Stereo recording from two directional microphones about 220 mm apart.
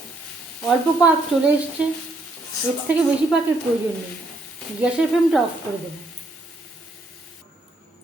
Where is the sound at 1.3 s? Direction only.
5° right (ahead or behind).